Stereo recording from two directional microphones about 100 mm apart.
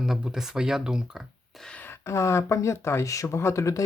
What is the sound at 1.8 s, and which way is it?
Speech, 25° left (ahead or behind).